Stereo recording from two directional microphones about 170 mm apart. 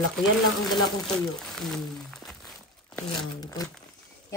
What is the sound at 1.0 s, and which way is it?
Crumpling, centre (ahead or behind).